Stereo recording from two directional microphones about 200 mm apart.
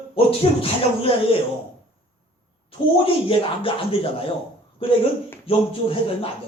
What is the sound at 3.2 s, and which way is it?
Speech, 25° left (ahead or behind).